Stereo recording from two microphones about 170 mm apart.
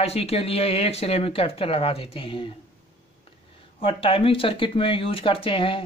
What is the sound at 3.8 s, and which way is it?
Speech, 35° left (ahead or behind).